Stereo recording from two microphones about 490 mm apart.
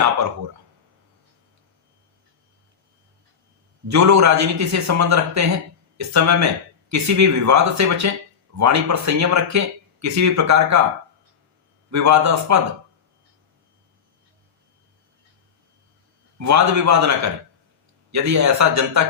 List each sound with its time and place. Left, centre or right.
3.8 s speech: right
11.9 s speech: right
16.4 s speech: right